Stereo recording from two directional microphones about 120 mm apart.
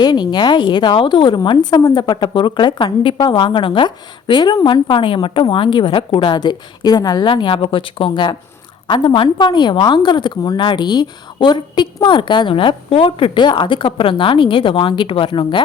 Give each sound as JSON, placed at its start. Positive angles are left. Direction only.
{"t": 0.0, "sound": "a woman's voice", "side_deg": 35}